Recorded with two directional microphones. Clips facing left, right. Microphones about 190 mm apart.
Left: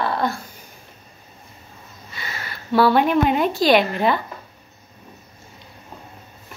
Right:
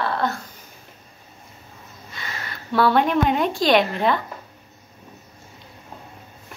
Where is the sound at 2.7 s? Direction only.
5° left (ahead or behind).